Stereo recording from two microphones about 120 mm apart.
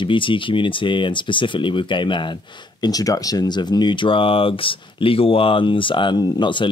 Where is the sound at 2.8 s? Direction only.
30° left (ahead or behind).